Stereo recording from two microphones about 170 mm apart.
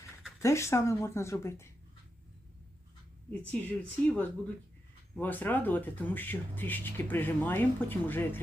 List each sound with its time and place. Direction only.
0.3 s speech: 15° left (ahead or behind)
3.4 s speech: 10° left (ahead or behind)